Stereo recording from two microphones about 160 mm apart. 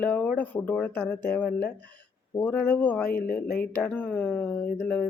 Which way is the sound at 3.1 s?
70° left (ahead or behind).